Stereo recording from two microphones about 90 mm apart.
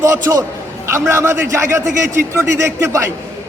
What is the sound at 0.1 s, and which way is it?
A man's voice, 35° right (ahead or behind).